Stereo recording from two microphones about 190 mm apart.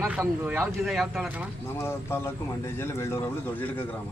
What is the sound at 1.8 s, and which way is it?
Speech, 10° left (ahead or behind).